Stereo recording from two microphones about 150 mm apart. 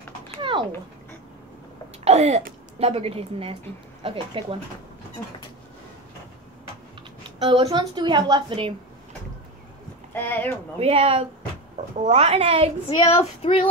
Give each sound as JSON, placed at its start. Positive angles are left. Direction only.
{"t": 0.4, "sound": "a sound", "side_deg": -35}
{"t": 2.0, "sound": "a sound", "side_deg": -45}
{"t": 2.8, "sound": "a woman's voice", "side_deg": -40}
{"t": 7.3, "sound": "a woman's voice", "side_deg": -40}
{"t": 10.1, "sound": "speech", "side_deg": 15}
{"t": 10.8, "sound": "a woman's voice", "side_deg": -40}
{"t": 12.9, "sound": "child singing", "side_deg": 40}